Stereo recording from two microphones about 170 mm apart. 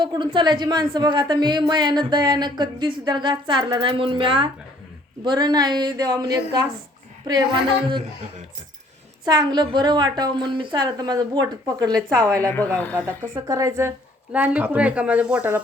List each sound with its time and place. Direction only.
0.0 s a woman's voice: 25° right (ahead or behind)
9.2 s a woman's voice: 25° right (ahead or behind)
12.5 s a woman's voice: 10° left (ahead or behind)
13.0 s a woman's voice: 20° right (ahead or behind)